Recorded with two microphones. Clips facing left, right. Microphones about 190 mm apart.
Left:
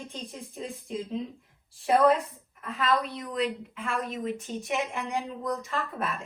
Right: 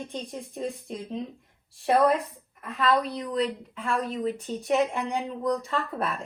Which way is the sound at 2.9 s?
35° right (ahead or behind).